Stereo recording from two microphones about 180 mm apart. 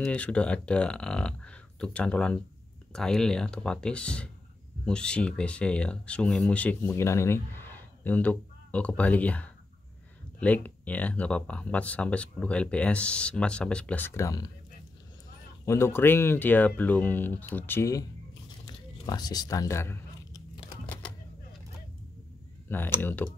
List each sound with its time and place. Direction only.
0.0 s speech: 5° left (ahead or behind)
15.6 s speech: 15° left (ahead or behind)
18.7 s a sound: 20° left (ahead or behind)
22.7 s speech: 10° left (ahead or behind)